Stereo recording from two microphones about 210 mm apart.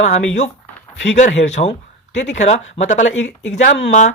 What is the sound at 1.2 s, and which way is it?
Speech, 35° left (ahead or behind).